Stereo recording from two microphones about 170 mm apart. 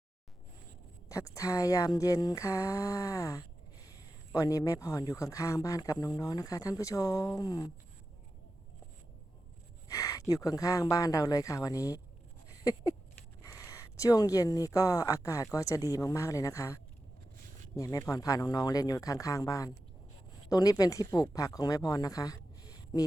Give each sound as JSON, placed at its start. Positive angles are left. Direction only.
{"t": 1.0, "sound": "speech", "side_deg": 15}
{"t": 9.9, "sound": "speech", "side_deg": 20}
{"t": 12.5, "sound": "a sound", "side_deg": 20}
{"t": 13.4, "sound": "speech", "side_deg": 20}